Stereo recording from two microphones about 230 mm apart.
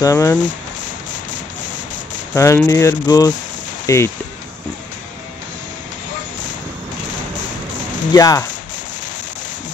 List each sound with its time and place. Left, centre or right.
0.0 s speech: centre
2.3 s speech: centre
8.1 s speech: centre